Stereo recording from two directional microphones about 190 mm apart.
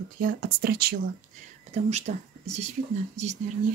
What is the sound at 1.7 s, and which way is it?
Speech, 35° right (ahead or behind).